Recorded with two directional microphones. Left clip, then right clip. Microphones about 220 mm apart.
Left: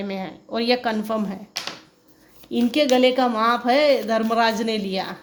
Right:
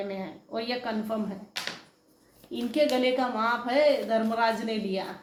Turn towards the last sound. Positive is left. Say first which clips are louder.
# left 6 dB
turn(degrees=50)  # may be behind; listen again after turning